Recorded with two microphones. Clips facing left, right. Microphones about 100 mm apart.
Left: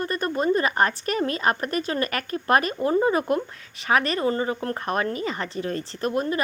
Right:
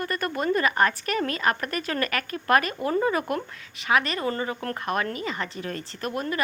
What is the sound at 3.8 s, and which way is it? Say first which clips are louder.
Speech: left 2 dB; 40° left (ahead or behind).